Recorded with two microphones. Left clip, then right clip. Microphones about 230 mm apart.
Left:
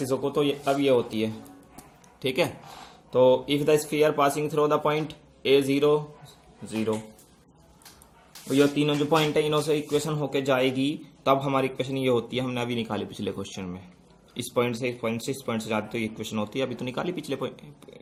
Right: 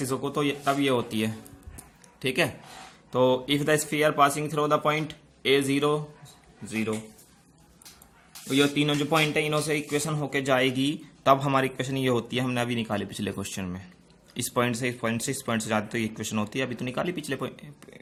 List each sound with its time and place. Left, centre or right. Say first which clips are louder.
0.0 s a man's voice: left 3 dB; right
8.4 s a man's voice: left 1 dB; centre